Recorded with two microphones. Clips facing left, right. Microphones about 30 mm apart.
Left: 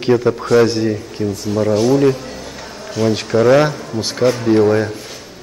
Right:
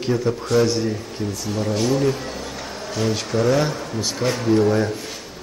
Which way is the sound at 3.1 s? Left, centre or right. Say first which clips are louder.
Left 8 dB; centre.